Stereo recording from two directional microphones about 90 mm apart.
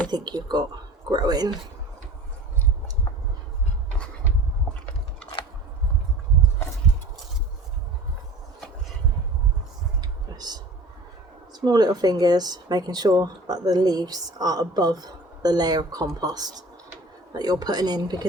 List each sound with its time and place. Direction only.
0.1 s speech: 50° right (ahead or behind)
5.4 s scissors: 70° left (ahead or behind)
10.0 s a sound: 50° right (ahead or behind)
11.6 s speech: 50° right (ahead or behind)